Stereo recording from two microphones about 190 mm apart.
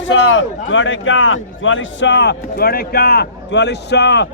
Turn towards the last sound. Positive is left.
turn(degrees=65)  # may be behind; listen again after turning